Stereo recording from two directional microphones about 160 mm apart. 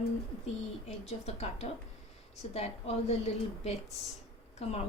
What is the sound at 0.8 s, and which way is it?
A woman's voice, 40° left (ahead or behind).